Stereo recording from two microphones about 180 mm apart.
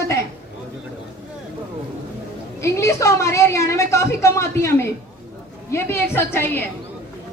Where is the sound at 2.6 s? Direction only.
15° left (ahead or behind).